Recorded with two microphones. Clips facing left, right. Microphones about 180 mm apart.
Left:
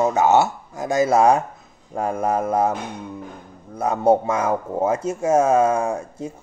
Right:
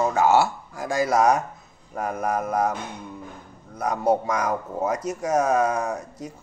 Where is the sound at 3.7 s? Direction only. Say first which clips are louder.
Left 5 dB; 25° left (ahead or behind).